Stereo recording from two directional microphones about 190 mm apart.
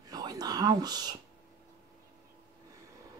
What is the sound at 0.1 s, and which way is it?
Whispering, 20° right (ahead or behind).